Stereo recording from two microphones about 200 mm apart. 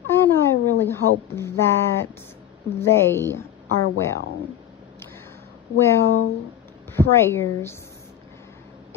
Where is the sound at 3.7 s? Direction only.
90° left.